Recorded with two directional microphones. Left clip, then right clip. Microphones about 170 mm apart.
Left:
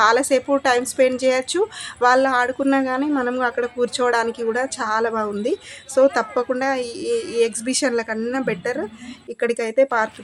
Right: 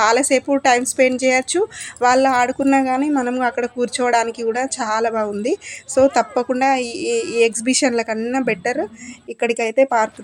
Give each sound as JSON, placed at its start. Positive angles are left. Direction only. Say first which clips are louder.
{"t": 0.0, "sound": "a woman's voice", "louder": "right 1 dB", "side_deg": -5}